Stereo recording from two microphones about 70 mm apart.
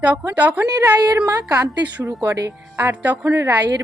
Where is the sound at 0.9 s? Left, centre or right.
Right.